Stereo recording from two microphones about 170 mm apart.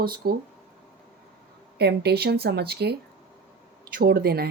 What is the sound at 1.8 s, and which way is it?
Speech, 75° right (ahead or behind).